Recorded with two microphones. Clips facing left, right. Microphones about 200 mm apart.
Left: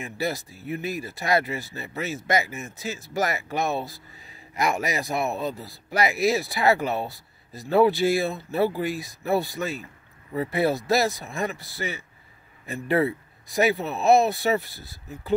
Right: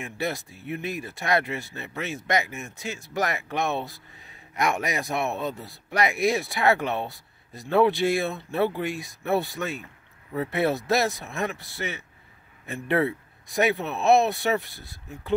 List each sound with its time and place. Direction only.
0.0 s speech: centre (ahead or behind)